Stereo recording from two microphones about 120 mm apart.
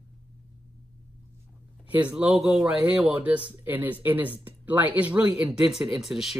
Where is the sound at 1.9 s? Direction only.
10° right (ahead or behind).